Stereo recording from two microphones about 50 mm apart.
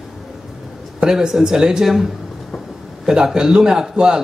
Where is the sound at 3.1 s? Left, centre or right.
Centre.